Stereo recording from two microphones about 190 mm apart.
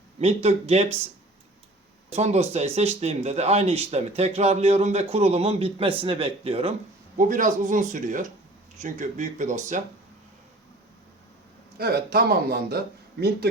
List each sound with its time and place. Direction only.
0.2 s speech: 35° right (ahead or behind)
2.1 s speech: 35° right (ahead or behind)
7.2 s speech: 45° right (ahead or behind)
11.8 s a man's voice: 55° right (ahead or behind)